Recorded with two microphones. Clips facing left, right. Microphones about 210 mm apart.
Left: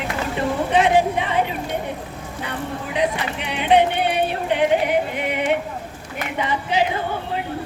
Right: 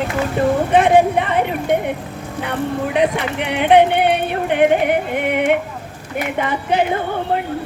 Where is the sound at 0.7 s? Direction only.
55° right (ahead or behind).